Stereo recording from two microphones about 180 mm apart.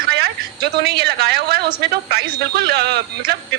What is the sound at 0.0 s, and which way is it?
A woman's voice, 60° right (ahead or behind).